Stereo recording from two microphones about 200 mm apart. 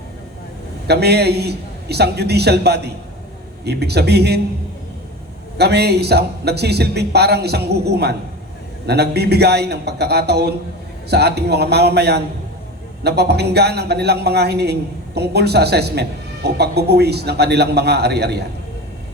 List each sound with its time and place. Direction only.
0.9 s a man's voice: 55° right (ahead or behind)
5.5 s a man's voice: 55° right (ahead or behind)